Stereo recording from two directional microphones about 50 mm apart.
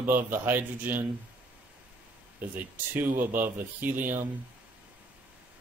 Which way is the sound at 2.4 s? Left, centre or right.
Right.